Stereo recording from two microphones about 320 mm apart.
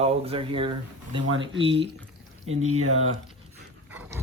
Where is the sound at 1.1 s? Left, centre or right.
Right.